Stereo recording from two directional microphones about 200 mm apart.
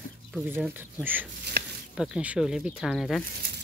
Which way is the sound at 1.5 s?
60° right (ahead or behind).